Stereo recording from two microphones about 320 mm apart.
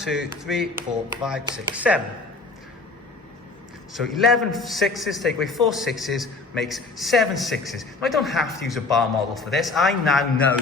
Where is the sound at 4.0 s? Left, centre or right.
Centre.